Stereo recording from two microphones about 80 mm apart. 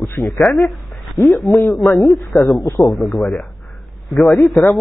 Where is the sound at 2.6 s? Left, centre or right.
Left.